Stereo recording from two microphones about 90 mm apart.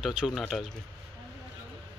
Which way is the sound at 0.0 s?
5° right (ahead or behind).